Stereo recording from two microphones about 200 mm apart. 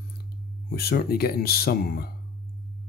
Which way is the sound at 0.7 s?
50° left (ahead or behind).